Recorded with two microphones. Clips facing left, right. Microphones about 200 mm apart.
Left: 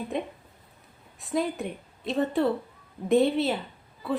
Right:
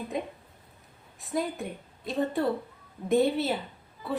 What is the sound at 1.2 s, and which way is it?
Speech, centre (ahead or behind).